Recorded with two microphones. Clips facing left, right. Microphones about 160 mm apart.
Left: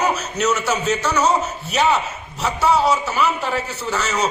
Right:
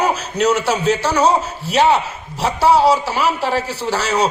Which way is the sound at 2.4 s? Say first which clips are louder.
Right 4 dB; 30° right (ahead or behind).